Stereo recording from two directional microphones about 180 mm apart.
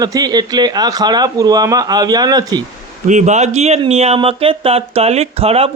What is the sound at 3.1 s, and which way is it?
Speech, 40° right (ahead or behind).